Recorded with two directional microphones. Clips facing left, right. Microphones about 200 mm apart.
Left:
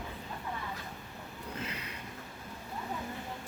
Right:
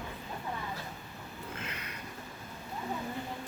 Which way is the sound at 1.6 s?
30° left (ahead or behind).